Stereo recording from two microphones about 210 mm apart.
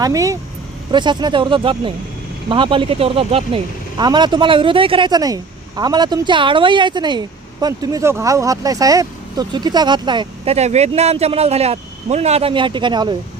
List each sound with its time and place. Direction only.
0.0 s speech: 15° right (ahead or behind)